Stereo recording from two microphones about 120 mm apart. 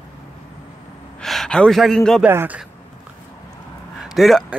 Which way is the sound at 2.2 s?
15° right (ahead or behind).